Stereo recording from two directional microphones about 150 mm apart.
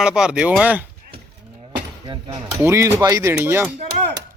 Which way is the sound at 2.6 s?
15° right (ahead or behind).